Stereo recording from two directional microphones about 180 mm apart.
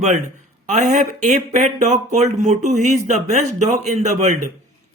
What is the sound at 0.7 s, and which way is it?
Speech, 40° right (ahead or behind).